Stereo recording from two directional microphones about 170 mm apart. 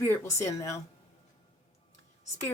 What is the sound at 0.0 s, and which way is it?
Speech, 15° left (ahead or behind).